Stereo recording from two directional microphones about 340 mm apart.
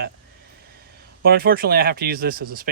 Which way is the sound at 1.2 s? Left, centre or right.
Right.